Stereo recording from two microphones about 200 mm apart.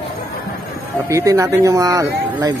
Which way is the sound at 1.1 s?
15° right (ahead or behind).